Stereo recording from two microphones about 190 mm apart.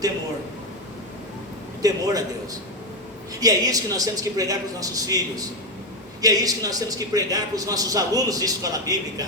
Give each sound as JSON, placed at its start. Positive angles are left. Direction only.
{"t": 1.8, "sound": "a man's voice", "side_deg": -20}